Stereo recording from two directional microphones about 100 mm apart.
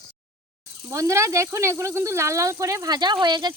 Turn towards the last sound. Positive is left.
turn(degrees=-45)  # may be behind; listen again after turning